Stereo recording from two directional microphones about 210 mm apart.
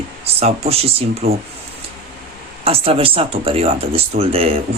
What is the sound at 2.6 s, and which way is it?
Speech, 25° right (ahead or behind).